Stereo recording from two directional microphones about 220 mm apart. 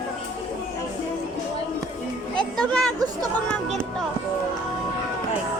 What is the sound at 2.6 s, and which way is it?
Speech, 5° left (ahead or behind).